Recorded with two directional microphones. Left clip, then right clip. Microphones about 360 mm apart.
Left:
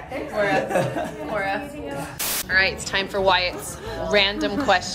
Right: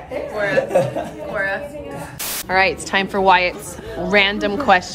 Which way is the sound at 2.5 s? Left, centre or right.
Centre.